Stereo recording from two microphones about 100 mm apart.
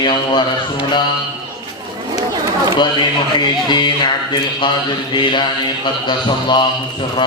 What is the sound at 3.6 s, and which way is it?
Music, 50° left (ahead or behind).